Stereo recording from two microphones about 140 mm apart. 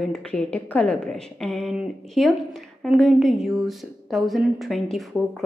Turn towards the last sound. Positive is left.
turn(degrees=0)  # may be behind; listen again after turning